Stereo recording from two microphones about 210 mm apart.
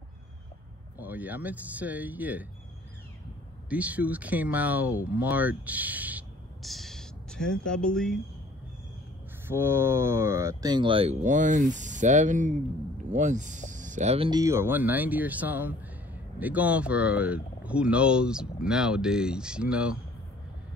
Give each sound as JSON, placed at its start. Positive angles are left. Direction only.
{"t": 0.9, "sound": "speech", "side_deg": -10}
{"t": 3.6, "sound": "speech", "side_deg": -5}
{"t": 9.5, "sound": "speech", "side_deg": -10}